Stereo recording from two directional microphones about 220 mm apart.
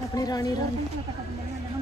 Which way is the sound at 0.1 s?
15° left (ahead or behind).